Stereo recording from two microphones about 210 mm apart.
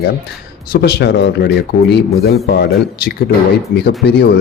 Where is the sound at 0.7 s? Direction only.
50° left (ahead or behind).